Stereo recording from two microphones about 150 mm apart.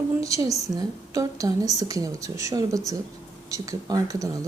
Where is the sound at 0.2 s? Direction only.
20° right (ahead or behind).